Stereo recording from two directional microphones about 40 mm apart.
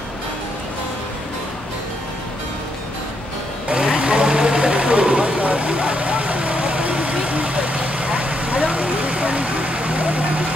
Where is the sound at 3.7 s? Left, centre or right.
Right.